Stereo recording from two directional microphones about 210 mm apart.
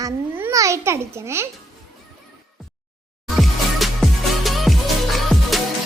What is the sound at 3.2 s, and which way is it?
Music, centre (ahead or behind).